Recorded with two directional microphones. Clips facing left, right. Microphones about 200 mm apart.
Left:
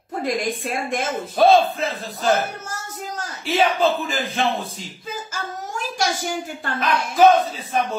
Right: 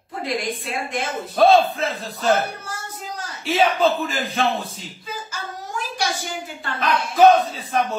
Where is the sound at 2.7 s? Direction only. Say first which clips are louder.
Left 1 dB; 45° left (ahead or behind).